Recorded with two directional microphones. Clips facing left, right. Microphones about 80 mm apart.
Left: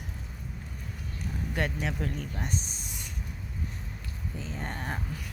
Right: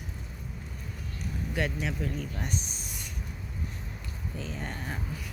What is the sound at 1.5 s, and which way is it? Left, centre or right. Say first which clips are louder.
Speech: even; left.